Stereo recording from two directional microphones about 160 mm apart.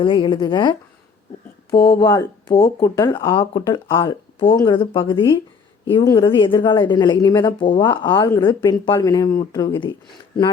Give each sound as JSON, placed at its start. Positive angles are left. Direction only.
{"t": 0.0, "sound": "speech", "side_deg": 30}